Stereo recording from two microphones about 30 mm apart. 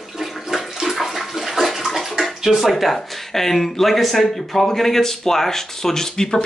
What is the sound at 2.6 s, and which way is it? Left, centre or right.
Speech, centre.